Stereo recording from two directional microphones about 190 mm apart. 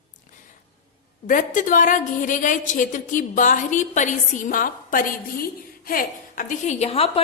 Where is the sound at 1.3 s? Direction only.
45° left (ahead or behind).